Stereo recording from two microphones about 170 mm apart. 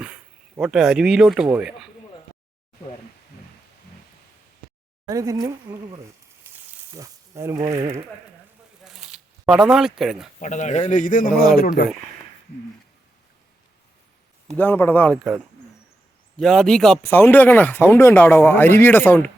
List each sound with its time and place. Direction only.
0.0 s speech: 5° right (ahead or behind)
5.0 s speech: 20° right (ahead or behind)
6.9 s speech: 15° right (ahead or behind)
8.8 s a sound: 5° right (ahead or behind)
10.0 s a man's voice: centre (ahead or behind)
10.4 s a man's voice: 45° left (ahead or behind)
14.5 s speech: 10° left (ahead or behind)
16.4 s a man's voice: 5° left (ahead or behind)
17.0 s speech: 15° left (ahead or behind)